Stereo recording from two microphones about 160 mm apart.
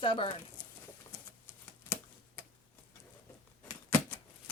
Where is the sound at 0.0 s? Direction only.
35° left (ahead or behind).